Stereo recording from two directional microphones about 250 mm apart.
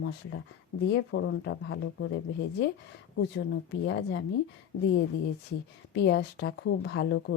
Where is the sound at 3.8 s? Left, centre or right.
Left.